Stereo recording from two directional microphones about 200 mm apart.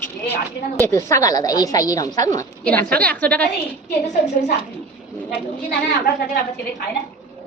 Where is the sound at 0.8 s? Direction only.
15° left (ahead or behind).